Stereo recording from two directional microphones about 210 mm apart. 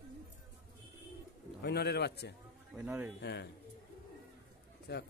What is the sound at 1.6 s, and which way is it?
Speech, 50° left (ahead or behind).